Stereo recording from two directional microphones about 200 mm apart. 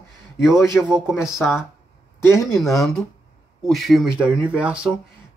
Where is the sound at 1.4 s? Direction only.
15° left (ahead or behind).